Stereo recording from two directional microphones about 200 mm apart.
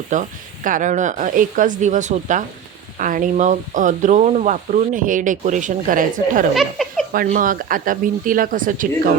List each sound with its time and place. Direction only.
0.1 s speech: 40° right (ahead or behind)
6.5 s speech: centre (ahead or behind)
7.3 s speech: 40° right (ahead or behind)